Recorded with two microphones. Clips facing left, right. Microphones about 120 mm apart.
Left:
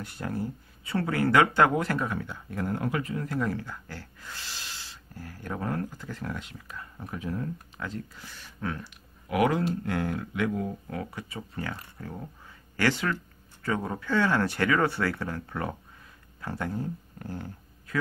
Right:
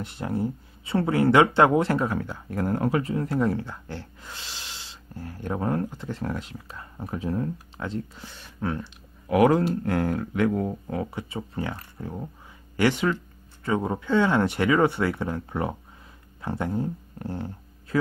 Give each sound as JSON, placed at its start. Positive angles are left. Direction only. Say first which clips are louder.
{"t": 0.0, "sound": "speech", "louder": "right 5 dB", "side_deg": -25}
{"t": 2.1, "sound": "speech", "louder": "right 5 dB", "side_deg": -45}
{"t": 9.3, "sound": "speech", "louder": "right 6 dB", "side_deg": -40}
{"t": 10.9, "sound": "speech", "louder": "right 5 dB", "side_deg": -25}